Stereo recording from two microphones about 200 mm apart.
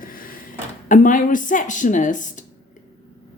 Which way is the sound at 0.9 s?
40° left (ahead or behind).